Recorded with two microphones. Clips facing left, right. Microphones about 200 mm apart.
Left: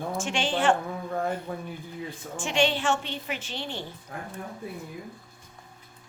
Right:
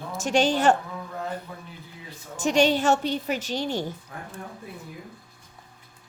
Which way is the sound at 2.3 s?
40° right (ahead or behind).